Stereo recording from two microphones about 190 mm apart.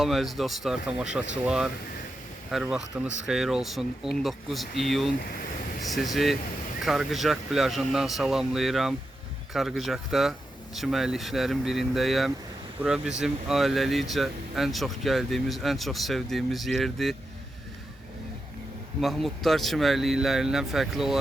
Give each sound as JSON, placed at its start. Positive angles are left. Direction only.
{"t": 0.0, "sound": "speech", "side_deg": 0}
{"t": 5.1, "sound": "speech", "side_deg": 55}
{"t": 5.8, "sound": "speech", "side_deg": 0}
{"t": 18.9, "sound": "speech", "side_deg": 0}